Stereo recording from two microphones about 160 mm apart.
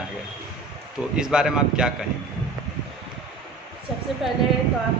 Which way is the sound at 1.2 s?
5° right (ahead or behind).